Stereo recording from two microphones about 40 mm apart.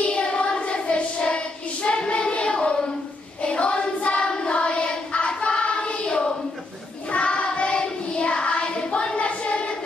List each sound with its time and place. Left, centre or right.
0.0 s child singing: left
3.4 s choir: left
7.1 s child singing: left